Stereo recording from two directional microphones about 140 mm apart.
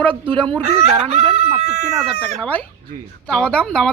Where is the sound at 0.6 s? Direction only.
50° right (ahead or behind).